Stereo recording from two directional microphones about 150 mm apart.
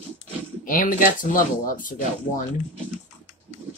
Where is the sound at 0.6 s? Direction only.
60° left (ahead or behind).